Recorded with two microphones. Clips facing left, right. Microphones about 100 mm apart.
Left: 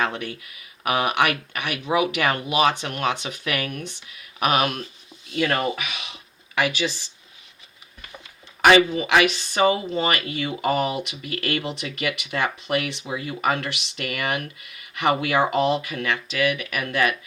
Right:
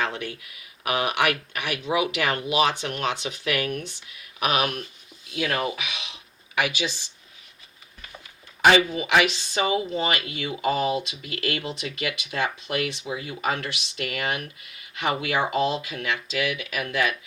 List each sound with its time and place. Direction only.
0.0 s speech: 50° left (ahead or behind)
8.6 s speech: 60° left (ahead or behind)